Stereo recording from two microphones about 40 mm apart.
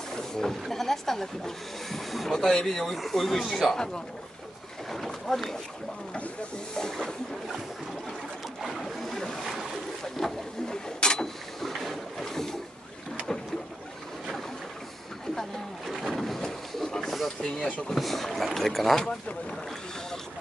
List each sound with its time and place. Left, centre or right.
0.1 s speech: centre
2.9 s speech: centre
3.7 s speech: centre
4.9 s speech: centre
6.7 s speech: centre
8.6 s a sound: centre
9.4 s boat: centre
10.1 s a sound: centre
11.0 s vehicle: centre
11.6 s boat: centre
16.1 s a sound: centre
17.4 s speech: centre
17.9 s speech: centre